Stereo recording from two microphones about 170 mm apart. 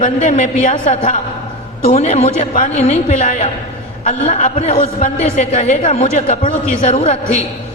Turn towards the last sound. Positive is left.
turn(degrees=40)  # may be behind; listen again after turning